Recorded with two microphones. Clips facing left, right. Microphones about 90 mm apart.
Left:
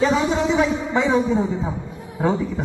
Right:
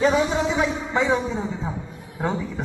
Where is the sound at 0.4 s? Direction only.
5° right (ahead or behind).